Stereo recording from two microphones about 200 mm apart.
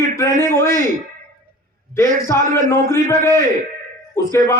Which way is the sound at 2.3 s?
15° left (ahead or behind).